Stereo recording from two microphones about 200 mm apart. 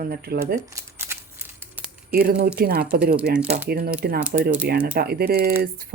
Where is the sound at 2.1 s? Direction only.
50° right (ahead or behind).